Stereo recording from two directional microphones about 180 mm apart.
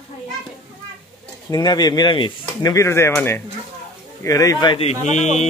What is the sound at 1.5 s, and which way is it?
Speech, 20° left (ahead or behind).